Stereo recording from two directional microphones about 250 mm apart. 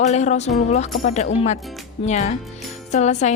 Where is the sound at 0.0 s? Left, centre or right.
Left.